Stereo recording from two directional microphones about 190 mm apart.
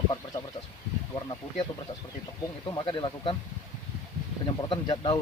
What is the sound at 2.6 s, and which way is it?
Speech, 25° left (ahead or behind).